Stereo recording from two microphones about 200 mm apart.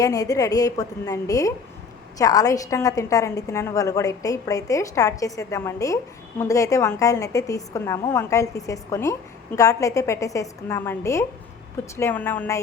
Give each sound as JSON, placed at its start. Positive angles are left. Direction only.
{"t": 0.0, "sound": "a woman's voice", "side_deg": 15}